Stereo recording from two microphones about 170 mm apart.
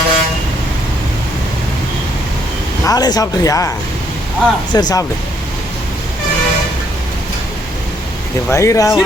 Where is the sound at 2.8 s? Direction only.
20° left (ahead or behind).